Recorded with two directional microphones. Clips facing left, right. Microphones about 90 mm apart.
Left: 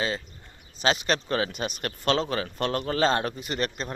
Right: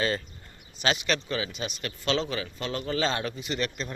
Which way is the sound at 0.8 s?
35° left (ahead or behind).